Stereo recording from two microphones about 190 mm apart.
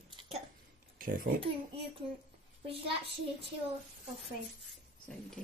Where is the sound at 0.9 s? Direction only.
50° right (ahead or behind).